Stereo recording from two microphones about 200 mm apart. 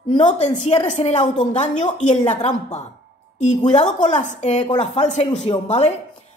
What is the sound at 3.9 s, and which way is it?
A woman's voice, 35° left (ahead or behind).